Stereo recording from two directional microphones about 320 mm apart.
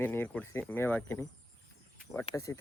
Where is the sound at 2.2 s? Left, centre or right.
Centre.